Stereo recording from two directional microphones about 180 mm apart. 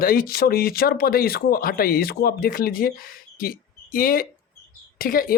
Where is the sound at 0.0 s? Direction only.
55° left (ahead or behind).